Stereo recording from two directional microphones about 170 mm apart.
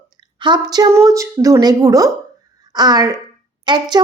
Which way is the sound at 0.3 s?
25° right (ahead or behind).